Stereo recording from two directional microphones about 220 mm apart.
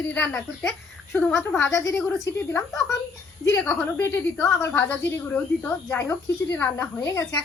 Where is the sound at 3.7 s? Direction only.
10° left (ahead or behind).